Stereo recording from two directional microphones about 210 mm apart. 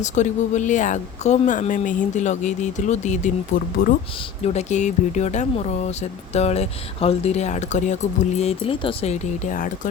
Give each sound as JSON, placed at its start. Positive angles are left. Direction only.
{"t": 0.0, "sound": "speech", "side_deg": 35}